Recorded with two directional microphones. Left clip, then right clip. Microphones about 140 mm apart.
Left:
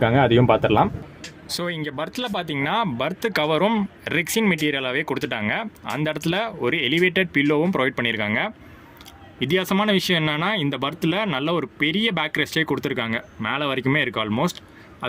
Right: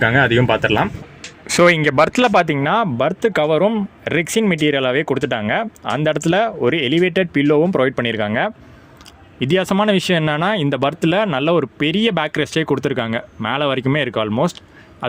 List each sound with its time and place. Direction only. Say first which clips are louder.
0.0 s speech: right 3 dB; 15° right (ahead or behind)
1.5 s speech: right 15 dB; 35° right (ahead or behind); by 3.8 s 10° right (ahead or behind)
4.0 s speech: right 5 dB; 25° right (ahead or behind)